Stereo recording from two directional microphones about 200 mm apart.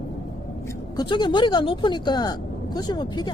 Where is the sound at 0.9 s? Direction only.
20° left (ahead or behind).